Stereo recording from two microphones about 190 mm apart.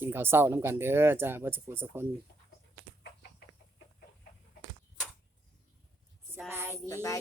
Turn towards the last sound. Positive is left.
turn(degrees=15)  # may be behind; listen again after turning